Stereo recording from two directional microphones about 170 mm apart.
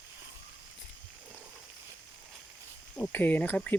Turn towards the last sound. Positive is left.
turn(degrees=10)  # may be behind; listen again after turning